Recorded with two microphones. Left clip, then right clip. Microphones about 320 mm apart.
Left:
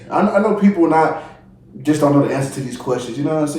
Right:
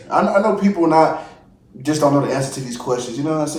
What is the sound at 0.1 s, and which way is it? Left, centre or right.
Speech, centre.